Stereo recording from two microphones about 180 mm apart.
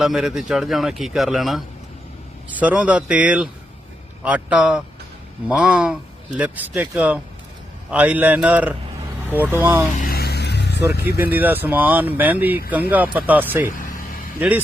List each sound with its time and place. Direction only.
0.0 s speech: centre (ahead or behind)
10.0 s vehicle: 55° left (ahead or behind)
11.2 s speech: 10° right (ahead or behind)
13.7 s vehicle: 50° left (ahead or behind)
14.3 s speech: 10° right (ahead or behind)